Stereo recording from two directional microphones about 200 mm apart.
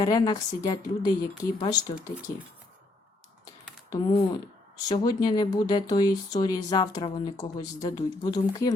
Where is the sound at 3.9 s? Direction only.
20° left (ahead or behind).